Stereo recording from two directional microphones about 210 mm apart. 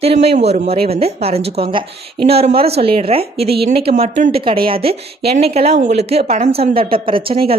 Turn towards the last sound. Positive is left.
turn(degrees=-25)  # may be behind; listen again after turning